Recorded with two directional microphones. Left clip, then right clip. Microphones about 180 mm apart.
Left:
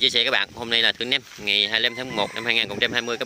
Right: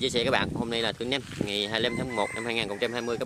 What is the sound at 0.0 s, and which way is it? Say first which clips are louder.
Speech: left 6 dB; 10° right (ahead or behind).